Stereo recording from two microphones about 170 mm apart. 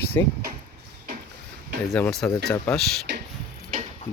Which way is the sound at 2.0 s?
Centre (ahead or behind).